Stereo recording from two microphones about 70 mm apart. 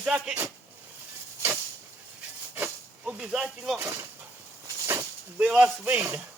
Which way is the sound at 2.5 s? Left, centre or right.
Right.